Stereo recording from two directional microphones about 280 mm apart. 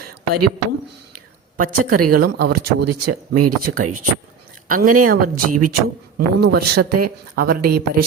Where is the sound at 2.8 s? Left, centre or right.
Right.